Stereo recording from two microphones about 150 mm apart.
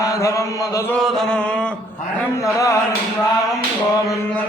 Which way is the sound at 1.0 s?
Centre (ahead or behind).